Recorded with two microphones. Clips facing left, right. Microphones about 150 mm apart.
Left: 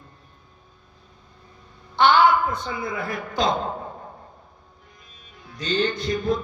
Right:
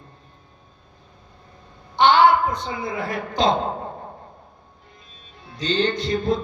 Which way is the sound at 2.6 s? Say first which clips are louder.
Right 1 dB; 30° right (ahead or behind).